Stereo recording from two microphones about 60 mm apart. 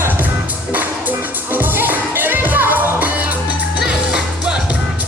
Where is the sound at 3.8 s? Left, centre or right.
Centre.